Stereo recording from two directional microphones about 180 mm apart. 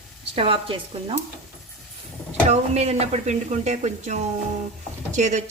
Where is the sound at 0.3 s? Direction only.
30° right (ahead or behind).